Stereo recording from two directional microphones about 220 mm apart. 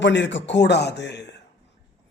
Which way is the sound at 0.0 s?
55° left (ahead or behind).